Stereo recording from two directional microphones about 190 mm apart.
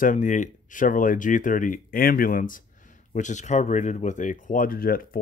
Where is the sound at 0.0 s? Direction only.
45° left (ahead or behind).